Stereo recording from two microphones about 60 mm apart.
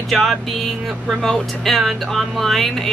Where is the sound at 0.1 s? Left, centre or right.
Centre.